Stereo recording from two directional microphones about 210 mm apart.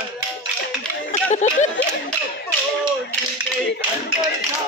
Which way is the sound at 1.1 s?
35° left (ahead or behind).